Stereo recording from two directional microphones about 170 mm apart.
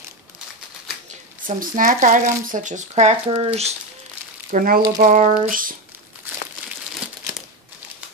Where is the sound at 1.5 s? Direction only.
50° right (ahead or behind); by 3.7 s 35° right (ahead or behind).